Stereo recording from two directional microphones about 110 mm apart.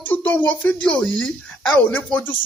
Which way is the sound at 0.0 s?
15° left (ahead or behind).